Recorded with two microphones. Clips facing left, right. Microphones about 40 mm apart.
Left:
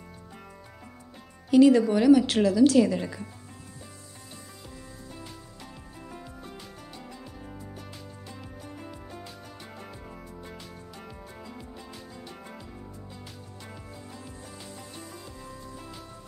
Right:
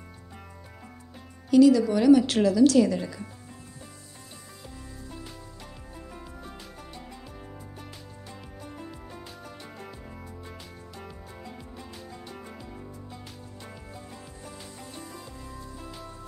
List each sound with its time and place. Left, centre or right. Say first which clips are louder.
1.6 s speech: even; left
1.9 s a woman's voice: even; centre